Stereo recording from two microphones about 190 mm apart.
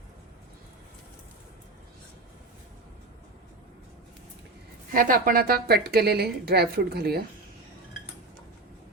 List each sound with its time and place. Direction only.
4.9 s a woman's voice: 45° right (ahead or behind)